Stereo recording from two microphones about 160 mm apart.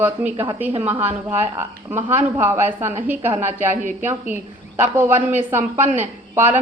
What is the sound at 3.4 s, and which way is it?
Speech, 45° right (ahead or behind).